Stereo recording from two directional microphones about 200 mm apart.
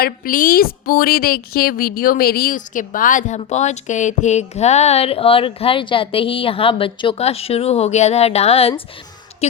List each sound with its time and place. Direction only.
0.0 s a woman's voice: 45° left (ahead or behind)